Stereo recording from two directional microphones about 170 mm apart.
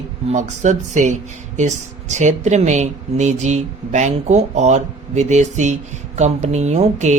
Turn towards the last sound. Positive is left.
turn(degrees=-40)  # may be behind; listen again after turning